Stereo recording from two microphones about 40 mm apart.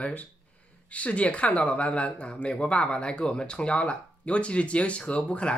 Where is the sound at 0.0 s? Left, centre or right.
Left.